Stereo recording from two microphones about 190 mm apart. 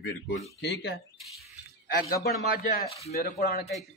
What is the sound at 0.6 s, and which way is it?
Speech, 65° left (ahead or behind).